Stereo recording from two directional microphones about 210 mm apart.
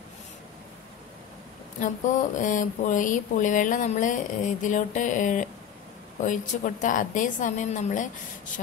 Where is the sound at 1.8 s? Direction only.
35° left (ahead or behind).